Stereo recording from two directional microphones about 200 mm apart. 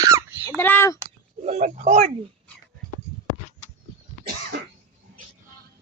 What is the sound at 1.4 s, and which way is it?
Speech, 35° right (ahead or behind).